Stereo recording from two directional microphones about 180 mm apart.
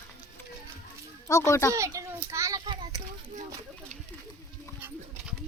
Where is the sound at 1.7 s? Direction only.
15° right (ahead or behind).